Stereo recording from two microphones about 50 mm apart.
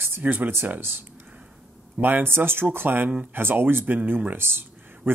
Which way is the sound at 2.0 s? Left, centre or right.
Right.